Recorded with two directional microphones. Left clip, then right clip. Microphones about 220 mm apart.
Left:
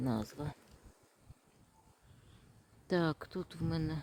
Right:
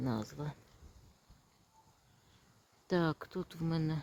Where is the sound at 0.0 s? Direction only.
5° left (ahead or behind).